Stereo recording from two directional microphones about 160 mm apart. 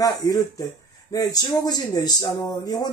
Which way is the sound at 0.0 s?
20° left (ahead or behind).